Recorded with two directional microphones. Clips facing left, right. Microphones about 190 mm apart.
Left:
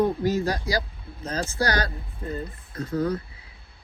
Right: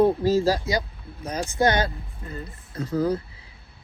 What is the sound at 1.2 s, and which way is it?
Speech, 15° right (ahead or behind).